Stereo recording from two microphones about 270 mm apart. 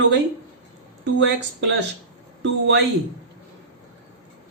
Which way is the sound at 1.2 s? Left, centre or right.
Right.